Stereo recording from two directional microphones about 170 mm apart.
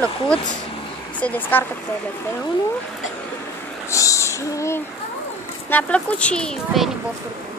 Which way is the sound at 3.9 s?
20° left (ahead or behind).